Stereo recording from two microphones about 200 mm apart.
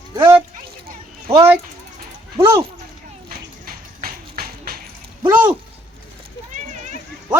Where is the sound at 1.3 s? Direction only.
15° right (ahead or behind).